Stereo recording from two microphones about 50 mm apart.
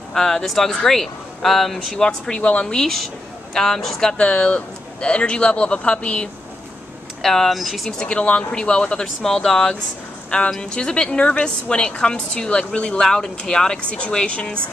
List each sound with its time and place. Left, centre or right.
0.1 s speech: centre
2.0 s speech: centre
7.2 s speech: centre
8.0 s speech: left
13.0 s speech: centre